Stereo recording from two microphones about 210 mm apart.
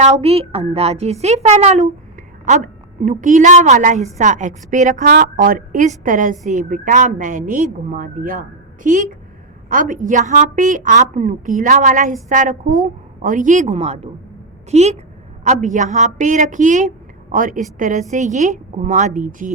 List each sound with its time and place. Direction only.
0.0 s a woman's voice: 30° right (ahead or behind)